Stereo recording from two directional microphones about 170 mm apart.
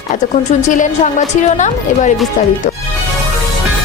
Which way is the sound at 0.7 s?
45° left (ahead or behind).